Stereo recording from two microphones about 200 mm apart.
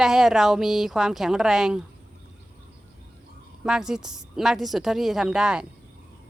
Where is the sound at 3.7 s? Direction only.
5° right (ahead or behind).